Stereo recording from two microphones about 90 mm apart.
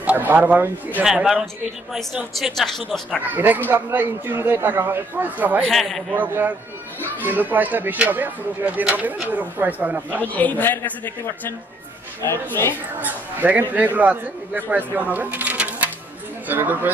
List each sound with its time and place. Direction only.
0.0 s speech: 20° right (ahead or behind)
1.0 s a man's voice: 5° right (ahead or behind)
3.2 s speech: 20° right (ahead or behind)
5.6 s speech: centre (ahead or behind)
6.1 s speech: 20° right (ahead or behind)
10.2 s a man's voice: 20° left (ahead or behind)
13.0 s speech: 20° right (ahead or behind)